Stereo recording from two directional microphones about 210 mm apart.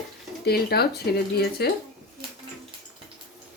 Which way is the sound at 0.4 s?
50° left (ahead or behind).